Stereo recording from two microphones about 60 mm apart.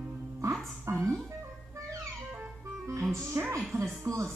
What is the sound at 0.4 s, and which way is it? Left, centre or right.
Music, right.